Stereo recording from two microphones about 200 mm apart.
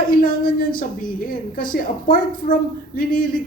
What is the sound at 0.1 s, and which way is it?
A woman's voice, 45° left (ahead or behind).